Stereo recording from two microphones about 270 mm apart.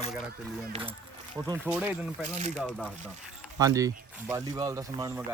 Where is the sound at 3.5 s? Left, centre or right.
Centre.